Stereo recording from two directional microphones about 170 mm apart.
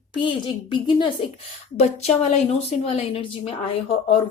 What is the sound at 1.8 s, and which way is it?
A woman's voice, 40° left (ahead or behind).